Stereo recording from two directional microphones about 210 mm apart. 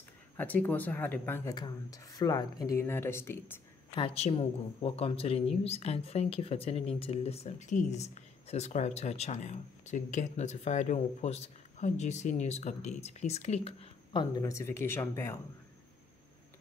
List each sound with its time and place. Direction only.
0.4 s speech: 5° left (ahead or behind)
3.9 s speech: 25° left (ahead or behind)